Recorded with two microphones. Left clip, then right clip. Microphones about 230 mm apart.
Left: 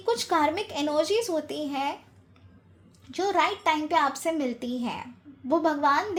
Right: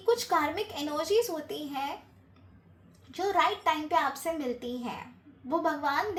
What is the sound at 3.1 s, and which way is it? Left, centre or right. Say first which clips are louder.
A woman's voice: left 2 dB; left.